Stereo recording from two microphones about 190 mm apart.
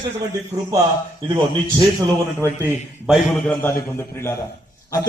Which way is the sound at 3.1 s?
10° left (ahead or behind).